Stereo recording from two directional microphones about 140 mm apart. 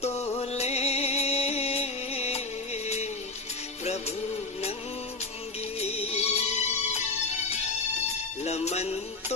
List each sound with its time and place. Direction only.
0.1 s music: 15° left (ahead or behind)
0.3 s music: 50° left (ahead or behind)
5.8 s music: 45° left (ahead or behind)
8.4 s music: 50° left (ahead or behind)